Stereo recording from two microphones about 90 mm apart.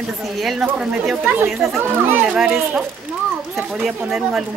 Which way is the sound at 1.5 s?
Centre (ahead or behind).